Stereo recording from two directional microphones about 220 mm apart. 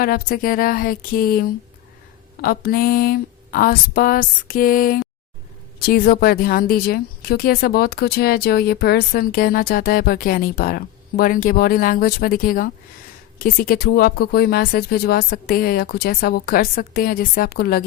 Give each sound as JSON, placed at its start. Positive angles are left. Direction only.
{"t": 0.0, "sound": "a woman's voice", "side_deg": 40}